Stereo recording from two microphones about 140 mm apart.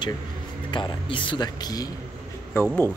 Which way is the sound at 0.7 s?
35° left (ahead or behind).